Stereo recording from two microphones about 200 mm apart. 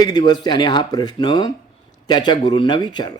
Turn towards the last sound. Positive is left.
turn(degrees=20)  # may be behind; listen again after turning